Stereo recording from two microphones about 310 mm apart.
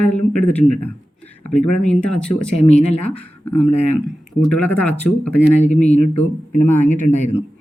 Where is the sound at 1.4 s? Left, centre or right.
Left.